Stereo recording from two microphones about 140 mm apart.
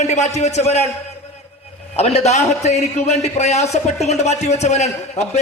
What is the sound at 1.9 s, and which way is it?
A man's voice, 50° left (ahead or behind).